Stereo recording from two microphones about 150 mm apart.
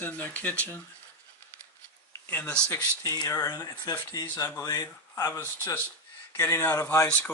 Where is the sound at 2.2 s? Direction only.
10° left (ahead or behind).